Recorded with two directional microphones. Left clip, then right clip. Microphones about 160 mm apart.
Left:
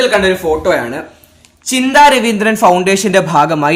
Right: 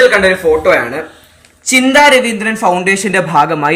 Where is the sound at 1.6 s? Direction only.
55° left (ahead or behind).